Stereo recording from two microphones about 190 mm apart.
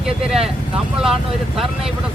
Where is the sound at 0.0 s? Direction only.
5° right (ahead or behind).